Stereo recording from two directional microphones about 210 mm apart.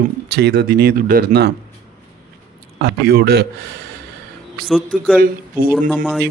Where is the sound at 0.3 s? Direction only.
50° right (ahead or behind).